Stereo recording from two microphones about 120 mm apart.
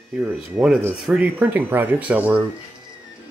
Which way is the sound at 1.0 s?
15° right (ahead or behind).